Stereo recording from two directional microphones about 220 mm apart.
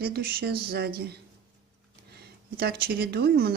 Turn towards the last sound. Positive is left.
turn(degrees=-45)  # may be behind; listen again after turning